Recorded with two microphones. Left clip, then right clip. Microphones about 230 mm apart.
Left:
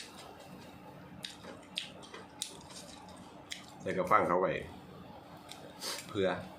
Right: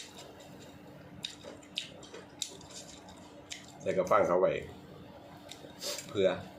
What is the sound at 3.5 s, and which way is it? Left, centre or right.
Speech, centre.